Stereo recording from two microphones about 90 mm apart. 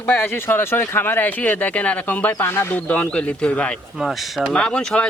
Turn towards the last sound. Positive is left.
turn(degrees=10)  # may be behind; listen again after turning